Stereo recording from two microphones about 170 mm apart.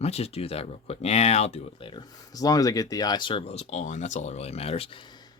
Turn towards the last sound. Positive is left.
turn(degrees=30)  # may be behind; listen again after turning